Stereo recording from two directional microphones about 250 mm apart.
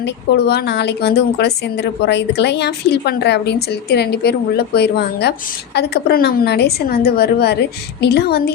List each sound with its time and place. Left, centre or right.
0.0 s a woman's voice: left